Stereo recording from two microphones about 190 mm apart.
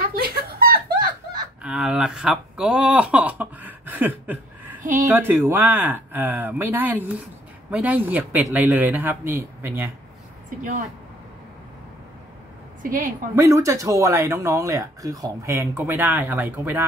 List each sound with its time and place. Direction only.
0.1 s a sound: 50° right (ahead or behind)
1.6 s a sound: 5° right (ahead or behind)
5.0 s speech: 10° right (ahead or behind)
10.6 s a woman's voice: 40° right (ahead or behind)
12.8 s a woman's voice: 45° right (ahead or behind)
13.4 s speech: 15° right (ahead or behind)